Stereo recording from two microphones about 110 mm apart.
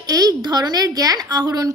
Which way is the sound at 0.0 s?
35° right (ahead or behind).